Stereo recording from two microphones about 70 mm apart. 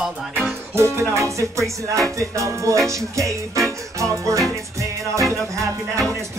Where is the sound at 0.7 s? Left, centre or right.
Right.